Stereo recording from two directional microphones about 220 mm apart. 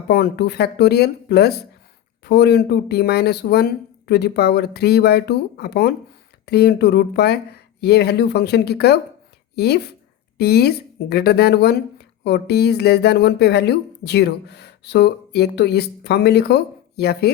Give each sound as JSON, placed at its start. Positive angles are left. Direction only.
{"t": 0.1, "sound": "speech", "side_deg": 50}